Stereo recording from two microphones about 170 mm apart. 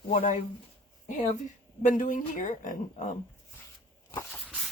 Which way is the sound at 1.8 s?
50° left (ahead or behind).